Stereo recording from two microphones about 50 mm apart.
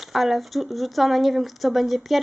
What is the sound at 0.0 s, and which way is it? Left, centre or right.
Speech, centre.